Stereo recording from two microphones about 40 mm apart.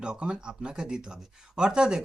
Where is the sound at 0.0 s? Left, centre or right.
Right.